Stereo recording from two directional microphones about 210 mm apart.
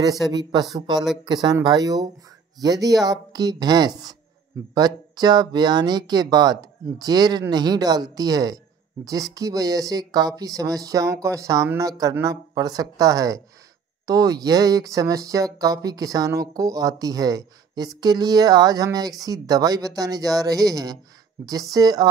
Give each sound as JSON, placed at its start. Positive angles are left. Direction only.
{"t": 0.5, "sound": "speech", "side_deg": -20}